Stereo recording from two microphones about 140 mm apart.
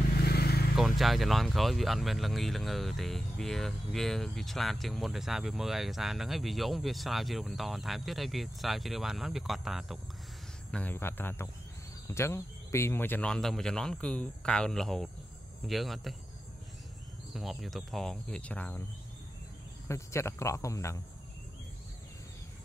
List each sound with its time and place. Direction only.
0.2 s vehicle: 90° left
0.7 s speech: centre (ahead or behind)
10.7 s speech: 10° left (ahead or behind)
17.3 s speech: centre (ahead or behind)
19.9 s speech: 20° left (ahead or behind)